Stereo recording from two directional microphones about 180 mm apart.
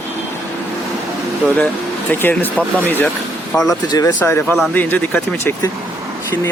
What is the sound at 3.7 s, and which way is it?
Speech, 20° left (ahead or behind).